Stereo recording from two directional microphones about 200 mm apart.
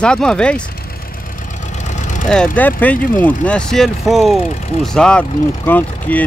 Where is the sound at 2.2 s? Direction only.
5° left (ahead or behind).